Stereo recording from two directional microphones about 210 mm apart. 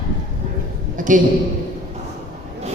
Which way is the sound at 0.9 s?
40° right (ahead or behind).